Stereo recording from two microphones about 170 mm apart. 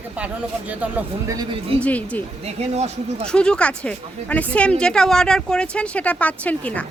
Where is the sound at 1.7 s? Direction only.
10° left (ahead or behind).